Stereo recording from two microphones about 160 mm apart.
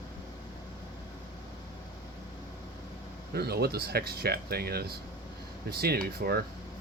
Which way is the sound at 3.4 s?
80° right.